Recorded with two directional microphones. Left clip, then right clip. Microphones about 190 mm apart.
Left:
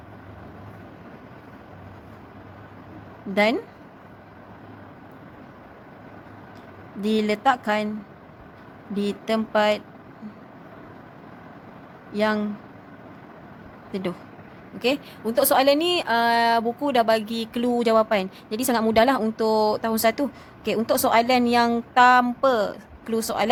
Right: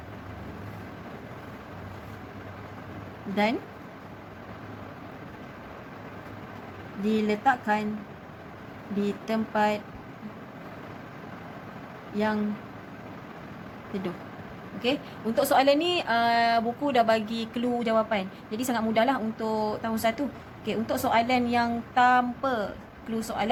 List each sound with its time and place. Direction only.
3.3 s a woman's voice: 50° left (ahead or behind)
7.0 s a woman's voice: 45° left (ahead or behind)
9.0 s a woman's voice: 45° left (ahead or behind)
12.1 s speech: 45° left (ahead or behind)
14.8 s a woman's voice: 45° left (ahead or behind)